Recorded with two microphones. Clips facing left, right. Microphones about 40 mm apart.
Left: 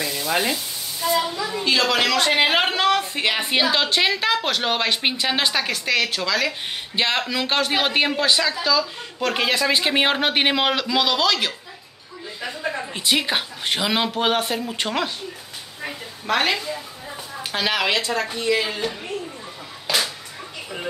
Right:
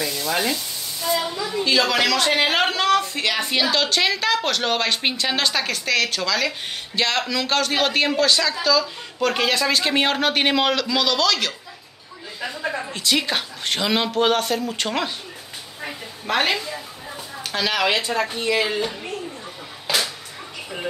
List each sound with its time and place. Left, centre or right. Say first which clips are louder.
0.0 s speech: even; centre
12.4 s a woman's voice: right 1 dB; centre
12.9 s speech: left 1 dB; centre
15.8 s a sound: left 1 dB; centre
17.5 s a woman's voice: even; centre
18.2 s speech: even; centre